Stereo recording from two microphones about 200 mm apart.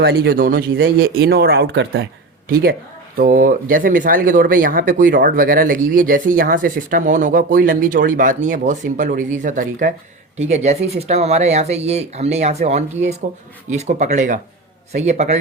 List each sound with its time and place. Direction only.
0.0 s speech: 50° right (ahead or behind); by 15.4 s 35° right (ahead or behind)